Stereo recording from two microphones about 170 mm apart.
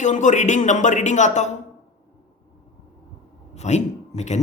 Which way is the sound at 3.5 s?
40° left (ahead or behind).